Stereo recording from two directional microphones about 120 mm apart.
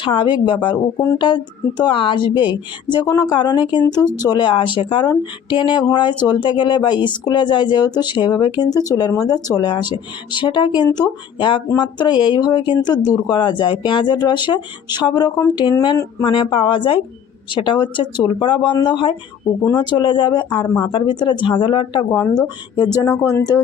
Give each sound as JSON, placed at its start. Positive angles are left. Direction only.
{"t": 0.0, "sound": "speech", "side_deg": 45}
{"t": 16.2, "sound": "speech", "side_deg": 45}